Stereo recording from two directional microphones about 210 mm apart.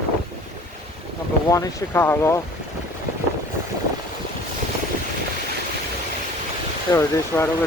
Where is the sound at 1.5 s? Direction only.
15° left (ahead or behind).